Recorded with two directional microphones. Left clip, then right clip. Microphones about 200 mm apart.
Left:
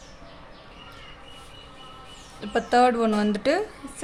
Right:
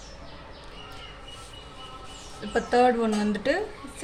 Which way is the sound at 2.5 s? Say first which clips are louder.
Left 2 dB; 30° left (ahead or behind).